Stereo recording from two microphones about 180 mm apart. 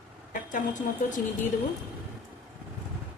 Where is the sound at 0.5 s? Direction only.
45° left (ahead or behind).